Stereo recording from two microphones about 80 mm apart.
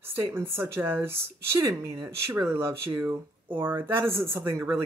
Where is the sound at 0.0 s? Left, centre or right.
Right.